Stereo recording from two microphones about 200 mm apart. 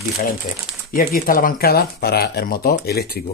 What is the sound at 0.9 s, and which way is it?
Speech, 45° left (ahead or behind).